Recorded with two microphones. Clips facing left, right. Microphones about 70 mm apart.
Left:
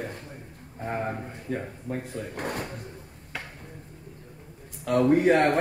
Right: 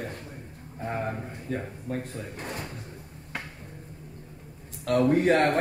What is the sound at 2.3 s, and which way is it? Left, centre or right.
Speech, left.